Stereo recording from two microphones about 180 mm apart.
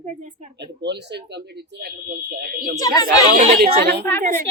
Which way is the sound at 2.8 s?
20° left (ahead or behind).